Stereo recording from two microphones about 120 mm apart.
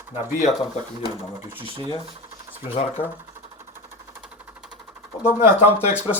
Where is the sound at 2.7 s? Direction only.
55° left (ahead or behind).